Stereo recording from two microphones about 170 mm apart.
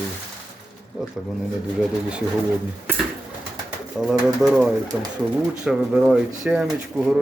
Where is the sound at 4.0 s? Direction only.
Centre (ahead or behind).